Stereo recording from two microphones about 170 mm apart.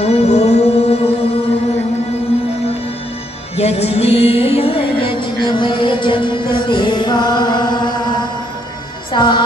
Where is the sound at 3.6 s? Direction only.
35° left (ahead or behind).